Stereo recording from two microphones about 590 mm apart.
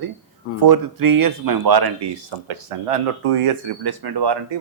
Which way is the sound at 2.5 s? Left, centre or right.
Right.